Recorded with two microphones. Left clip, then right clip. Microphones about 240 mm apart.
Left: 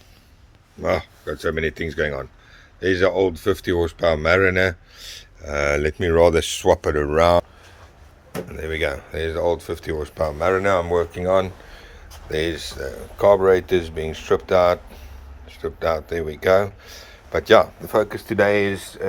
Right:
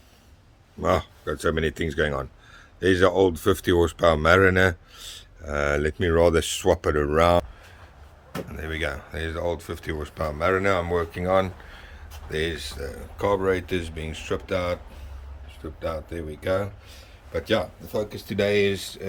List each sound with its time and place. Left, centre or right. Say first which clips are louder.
0.8 s speech: left 1 dB; centre
8.4 s speech: left 6 dB; centre